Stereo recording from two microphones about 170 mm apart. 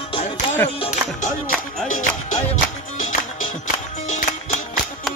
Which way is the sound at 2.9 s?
45° left (ahead or behind).